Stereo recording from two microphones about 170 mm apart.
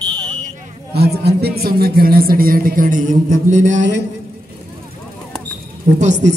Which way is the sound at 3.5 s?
45° right (ahead or behind).